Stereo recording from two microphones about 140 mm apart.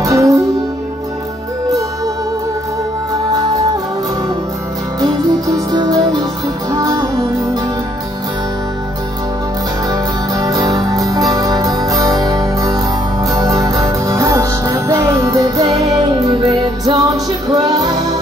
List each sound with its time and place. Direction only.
0.0 s music: 25° right (ahead or behind)
5.0 s music: 25° right (ahead or behind)
9.8 s music: 25° right (ahead or behind)